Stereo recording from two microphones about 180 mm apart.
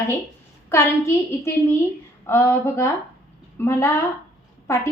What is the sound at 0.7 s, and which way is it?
A woman's voice, 15° left (ahead or behind).